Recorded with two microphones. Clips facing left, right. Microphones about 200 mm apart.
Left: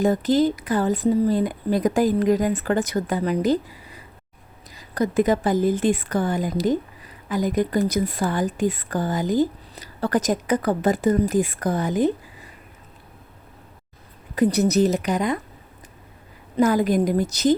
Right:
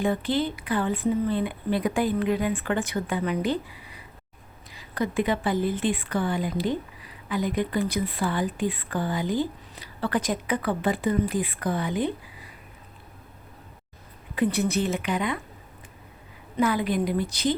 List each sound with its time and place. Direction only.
0.0 s speech: 40° left (ahead or behind)
14.3 s speech: 40° left (ahead or behind)
16.6 s speech: 40° left (ahead or behind)